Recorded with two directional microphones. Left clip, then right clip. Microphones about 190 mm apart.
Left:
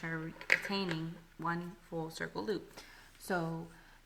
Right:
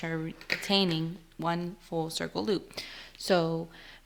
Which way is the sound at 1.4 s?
40° right (ahead or behind).